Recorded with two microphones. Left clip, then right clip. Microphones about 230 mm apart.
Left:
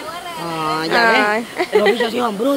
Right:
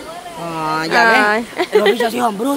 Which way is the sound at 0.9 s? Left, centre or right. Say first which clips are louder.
Right 2 dB; centre.